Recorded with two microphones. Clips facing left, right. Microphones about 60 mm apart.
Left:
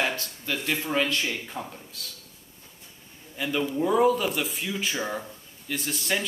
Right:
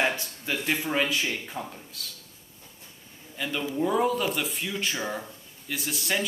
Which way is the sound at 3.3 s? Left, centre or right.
Centre.